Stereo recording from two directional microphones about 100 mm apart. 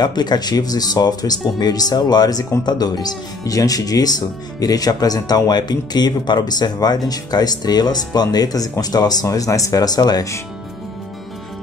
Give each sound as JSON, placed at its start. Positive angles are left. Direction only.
{"t": 0.0, "sound": "speech", "side_deg": 45}